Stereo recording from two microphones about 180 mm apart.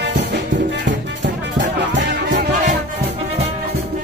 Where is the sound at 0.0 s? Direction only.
70° right (ahead or behind).